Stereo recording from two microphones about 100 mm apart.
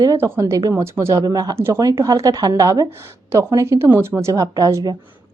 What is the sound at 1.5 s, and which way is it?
Speech, 25° right (ahead or behind).